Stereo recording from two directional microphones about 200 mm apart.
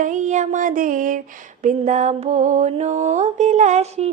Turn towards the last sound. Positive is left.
turn(degrees=-30)  # may be behind; listen again after turning